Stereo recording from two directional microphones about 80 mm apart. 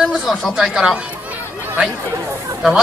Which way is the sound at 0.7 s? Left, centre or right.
Centre.